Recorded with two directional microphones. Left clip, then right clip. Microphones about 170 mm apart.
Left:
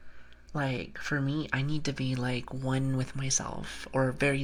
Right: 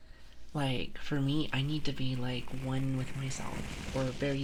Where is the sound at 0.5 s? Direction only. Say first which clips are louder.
Left 2 dB; 10° right (ahead or behind); by 4.3 s 15° left (ahead or behind).